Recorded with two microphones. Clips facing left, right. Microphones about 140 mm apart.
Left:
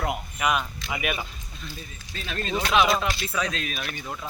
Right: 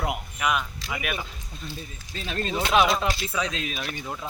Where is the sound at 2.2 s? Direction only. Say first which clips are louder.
Right 2 dB; 30° right (ahead or behind).